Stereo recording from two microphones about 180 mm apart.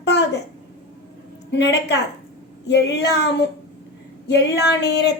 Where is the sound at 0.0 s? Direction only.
70° left (ahead or behind).